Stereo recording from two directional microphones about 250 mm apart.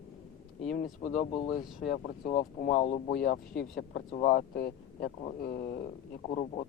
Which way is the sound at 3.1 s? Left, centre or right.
Left.